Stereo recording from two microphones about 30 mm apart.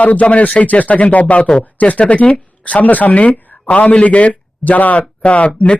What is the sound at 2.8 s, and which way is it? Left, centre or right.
Speech, left.